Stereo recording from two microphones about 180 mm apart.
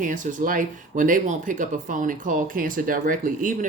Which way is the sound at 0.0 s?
45° right (ahead or behind).